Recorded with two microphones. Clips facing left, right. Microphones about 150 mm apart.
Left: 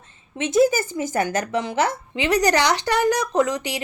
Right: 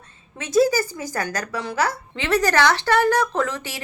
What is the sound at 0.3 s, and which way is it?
A woman's voice, 20° left (ahead or behind).